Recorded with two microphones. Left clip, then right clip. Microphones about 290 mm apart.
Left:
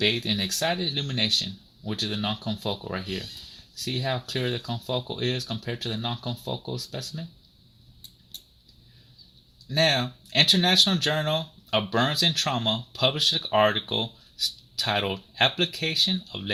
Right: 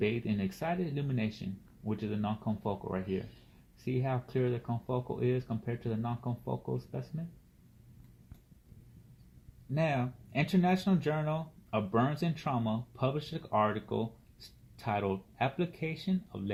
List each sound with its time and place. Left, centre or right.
0.0 s speech: left
9.7 s speech: left